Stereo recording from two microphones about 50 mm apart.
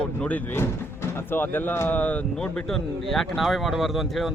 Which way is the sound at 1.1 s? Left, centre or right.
Left.